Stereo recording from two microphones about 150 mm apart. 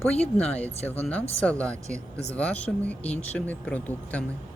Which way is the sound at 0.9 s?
10° left (ahead or behind).